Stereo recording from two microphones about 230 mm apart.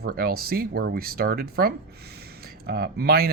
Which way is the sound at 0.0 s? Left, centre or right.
Right.